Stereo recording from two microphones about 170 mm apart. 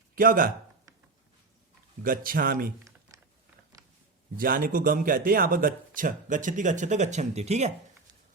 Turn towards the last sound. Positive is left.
turn(degrees=-40)  # may be behind; listen again after turning